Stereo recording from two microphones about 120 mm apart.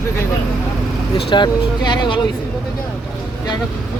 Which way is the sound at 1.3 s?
40° left (ahead or behind).